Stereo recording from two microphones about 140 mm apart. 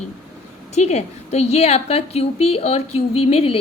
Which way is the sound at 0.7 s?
50° left (ahead or behind).